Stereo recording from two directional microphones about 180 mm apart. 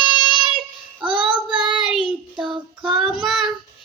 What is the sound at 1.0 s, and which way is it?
Child singing, 30° right (ahead or behind).